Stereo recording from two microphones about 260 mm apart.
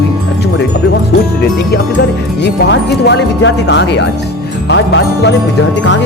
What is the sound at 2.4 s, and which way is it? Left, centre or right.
Speech, left.